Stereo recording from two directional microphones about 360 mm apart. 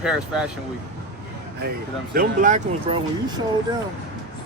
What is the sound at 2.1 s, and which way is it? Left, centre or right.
Speech, right.